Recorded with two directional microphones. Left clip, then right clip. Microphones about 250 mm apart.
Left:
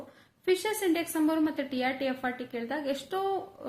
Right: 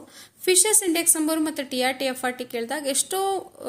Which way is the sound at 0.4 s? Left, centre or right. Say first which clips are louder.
Right 6 dB; right.